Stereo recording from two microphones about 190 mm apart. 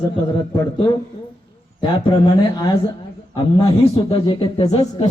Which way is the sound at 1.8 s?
25° left (ahead or behind).